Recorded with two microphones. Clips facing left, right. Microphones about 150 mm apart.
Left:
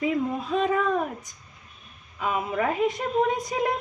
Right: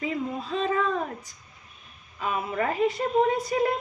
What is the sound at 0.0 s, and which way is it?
Speech, 10° left (ahead or behind).